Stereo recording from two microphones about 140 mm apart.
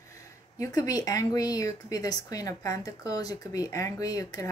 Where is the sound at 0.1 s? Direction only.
25° left (ahead or behind).